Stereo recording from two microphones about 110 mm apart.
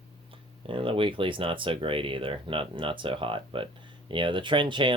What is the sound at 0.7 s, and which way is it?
Speech, 55° right (ahead or behind).